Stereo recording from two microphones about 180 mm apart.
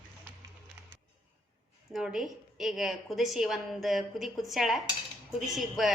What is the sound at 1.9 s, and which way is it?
A woman's voice, 5° right (ahead or behind).